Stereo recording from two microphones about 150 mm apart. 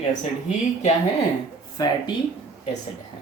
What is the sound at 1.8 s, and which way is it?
Speech, 25° left (ahead or behind).